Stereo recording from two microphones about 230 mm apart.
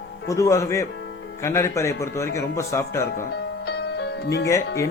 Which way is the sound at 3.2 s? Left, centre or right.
Left.